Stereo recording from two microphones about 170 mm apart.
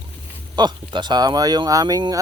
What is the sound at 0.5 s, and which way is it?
Speech, 25° right (ahead or behind).